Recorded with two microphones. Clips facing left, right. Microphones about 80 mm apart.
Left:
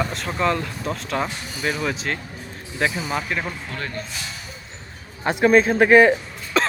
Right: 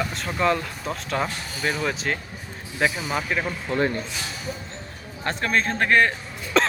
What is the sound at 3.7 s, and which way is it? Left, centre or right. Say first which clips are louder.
Speech: right 8 dB; right.